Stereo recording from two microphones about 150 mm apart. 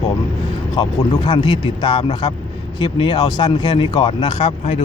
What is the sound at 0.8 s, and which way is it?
A man's voice, 30° left (ahead or behind).